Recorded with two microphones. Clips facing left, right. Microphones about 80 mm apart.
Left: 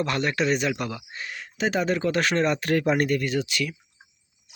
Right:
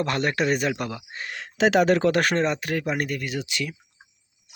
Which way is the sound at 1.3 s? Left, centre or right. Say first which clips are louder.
Right 6 dB; right.